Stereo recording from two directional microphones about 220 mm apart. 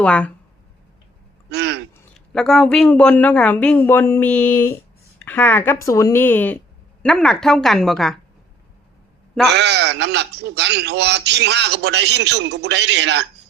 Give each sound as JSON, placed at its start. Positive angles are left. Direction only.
{"t": 0.0, "sound": "speech", "side_deg": 5}
{"t": 1.5, "sound": "a sound", "side_deg": -50}
{"t": 2.1, "sound": "speech", "side_deg": 0}
{"t": 9.5, "sound": "speech", "side_deg": -50}